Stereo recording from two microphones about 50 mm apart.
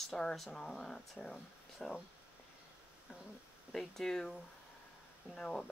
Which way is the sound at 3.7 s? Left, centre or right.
Centre.